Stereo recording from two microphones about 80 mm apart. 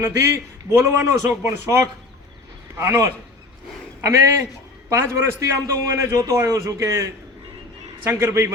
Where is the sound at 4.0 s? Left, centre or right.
Right.